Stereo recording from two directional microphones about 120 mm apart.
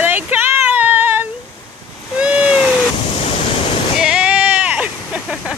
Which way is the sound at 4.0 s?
5° right (ahead or behind).